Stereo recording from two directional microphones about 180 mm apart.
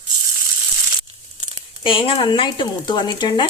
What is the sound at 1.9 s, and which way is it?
A woman's voice, 30° left (ahead or behind).